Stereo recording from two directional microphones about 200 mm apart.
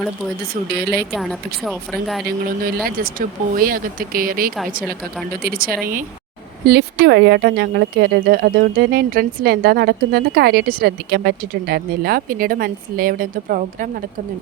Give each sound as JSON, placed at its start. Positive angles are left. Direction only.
{"t": 0.7, "sound": "speech", "side_deg": -55}
{"t": 1.1, "sound": "speech", "side_deg": 0}
{"t": 2.8, "sound": "speech", "side_deg": -45}
{"t": 6.7, "sound": "speech", "side_deg": -55}